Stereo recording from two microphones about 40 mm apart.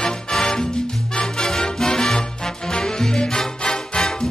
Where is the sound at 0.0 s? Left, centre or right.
Centre.